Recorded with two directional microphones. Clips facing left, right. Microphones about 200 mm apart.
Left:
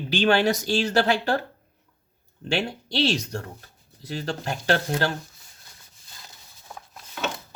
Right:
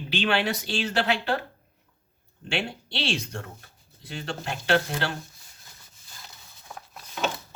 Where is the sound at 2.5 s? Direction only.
40° left (ahead or behind).